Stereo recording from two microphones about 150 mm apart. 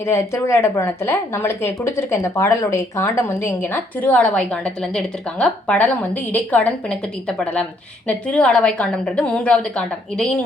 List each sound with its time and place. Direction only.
0.0 s a woman's voice: 20° left (ahead or behind)